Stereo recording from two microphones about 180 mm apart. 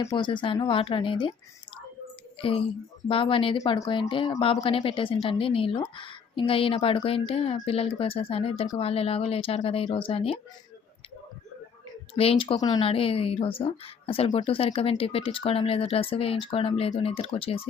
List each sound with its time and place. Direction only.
0.0 s speech: 25° left (ahead or behind)
2.4 s speech: 30° left (ahead or behind)
12.1 s speech: 30° left (ahead or behind)